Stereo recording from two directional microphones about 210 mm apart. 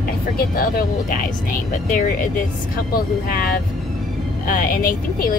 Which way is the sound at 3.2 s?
45° left (ahead or behind).